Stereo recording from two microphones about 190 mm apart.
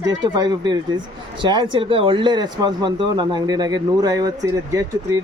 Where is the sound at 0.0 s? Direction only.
20° right (ahead or behind).